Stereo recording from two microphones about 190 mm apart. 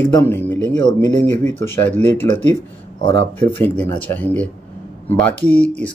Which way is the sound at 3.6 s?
10° left (ahead or behind).